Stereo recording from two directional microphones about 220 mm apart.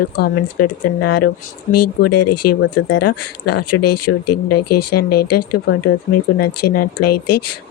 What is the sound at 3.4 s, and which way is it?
Speech, 45° left (ahead or behind).